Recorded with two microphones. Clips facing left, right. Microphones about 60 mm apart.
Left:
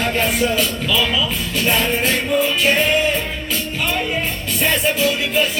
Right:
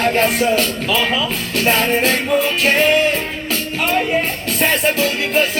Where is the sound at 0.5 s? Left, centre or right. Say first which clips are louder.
Right 2 dB; right.